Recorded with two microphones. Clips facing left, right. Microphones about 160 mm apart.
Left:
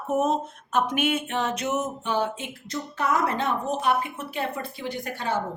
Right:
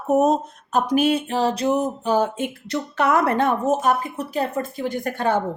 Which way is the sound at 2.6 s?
70° right (ahead or behind).